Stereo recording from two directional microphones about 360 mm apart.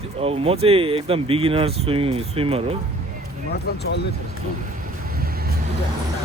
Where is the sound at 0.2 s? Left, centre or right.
Centre.